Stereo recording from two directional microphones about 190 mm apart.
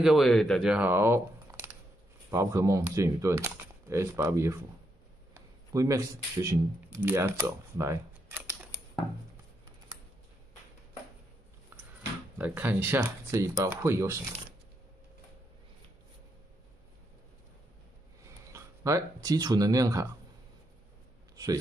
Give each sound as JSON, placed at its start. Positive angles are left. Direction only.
{"t": 0.0, "sound": "speech", "side_deg": 0}
{"t": 8.7, "sound": "a sound", "side_deg": 15}
{"t": 9.9, "sound": "computer keyboard", "side_deg": -20}
{"t": 11.7, "sound": "a sound", "side_deg": -10}
{"t": 12.4, "sound": "speech", "side_deg": -10}
{"t": 18.5, "sound": "speech", "side_deg": -15}